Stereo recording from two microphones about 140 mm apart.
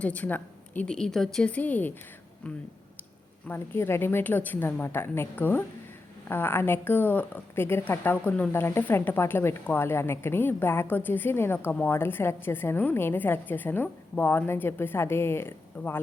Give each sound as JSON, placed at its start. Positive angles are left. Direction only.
{"t": 0.0, "sound": "a woman's voice", "side_deg": 10}
{"t": 3.4, "sound": "a woman's voice", "side_deg": 15}